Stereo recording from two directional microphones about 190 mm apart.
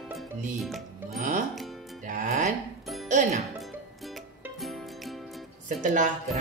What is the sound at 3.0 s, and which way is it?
Speech, 40° right (ahead or behind).